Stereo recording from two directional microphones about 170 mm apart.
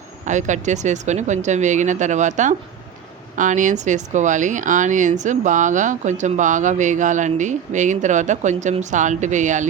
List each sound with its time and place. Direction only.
0.3 s speech: 45° right (ahead or behind)